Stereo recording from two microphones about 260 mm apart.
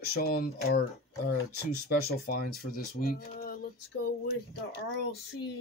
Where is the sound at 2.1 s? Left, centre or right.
Left.